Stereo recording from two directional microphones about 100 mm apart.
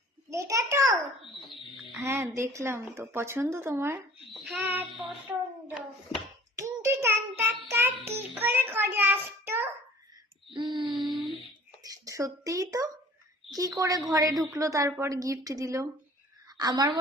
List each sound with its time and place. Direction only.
0.3 s a sound: 30° right (ahead or behind)
1.7 s music: centre (ahead or behind)
2.0 s a woman's voice: 25° right (ahead or behind)
4.3 s child singing: centre (ahead or behind)
4.6 s a woman's voice: 20° right (ahead or behind)
6.6 s child singing: 25° right (ahead or behind)
10.5 s owl: 50° right (ahead or behind)
11.8 s a sound: 35° right (ahead or behind)
13.5 s a woman's voice: 40° right (ahead or behind)